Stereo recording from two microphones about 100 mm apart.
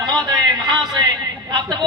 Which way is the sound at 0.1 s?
40° right (ahead or behind).